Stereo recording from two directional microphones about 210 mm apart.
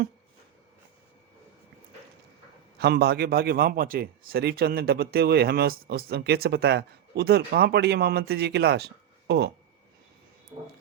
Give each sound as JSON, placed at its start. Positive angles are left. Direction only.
{"t": 2.7, "sound": "speech", "side_deg": -50}
{"t": 10.5, "sound": "speech", "side_deg": -20}